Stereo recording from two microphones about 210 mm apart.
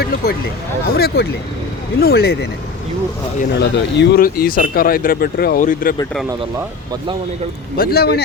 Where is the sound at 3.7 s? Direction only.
55° left (ahead or behind).